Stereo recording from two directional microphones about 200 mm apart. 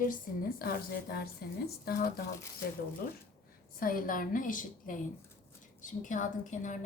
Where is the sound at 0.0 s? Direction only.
45° left (ahead or behind).